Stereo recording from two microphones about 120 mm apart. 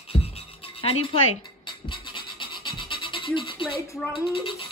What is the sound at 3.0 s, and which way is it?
Scratch, 45° left (ahead or behind).